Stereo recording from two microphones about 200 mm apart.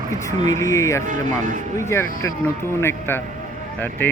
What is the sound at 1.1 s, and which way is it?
Speech, 40° right (ahead or behind).